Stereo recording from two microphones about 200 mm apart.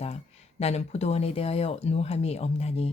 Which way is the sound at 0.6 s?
30° left (ahead or behind).